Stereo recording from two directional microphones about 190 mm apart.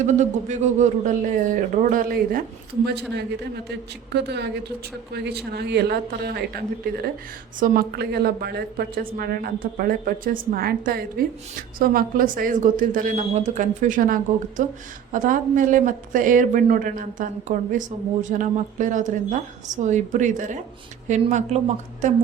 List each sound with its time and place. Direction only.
0.0 s speech: 40° right (ahead or behind)
2.8 s a woman's voice: 60° right (ahead or behind); by 21.6 s 40° right (ahead or behind)